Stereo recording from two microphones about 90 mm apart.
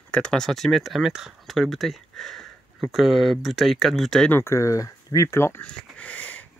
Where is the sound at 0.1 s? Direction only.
10° left (ahead or behind).